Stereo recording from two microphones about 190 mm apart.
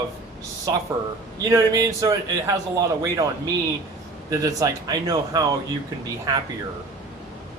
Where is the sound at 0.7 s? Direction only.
20° right (ahead or behind).